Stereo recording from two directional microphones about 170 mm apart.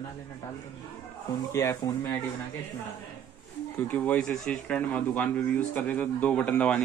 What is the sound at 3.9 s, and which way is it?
Speech, 5° left (ahead or behind).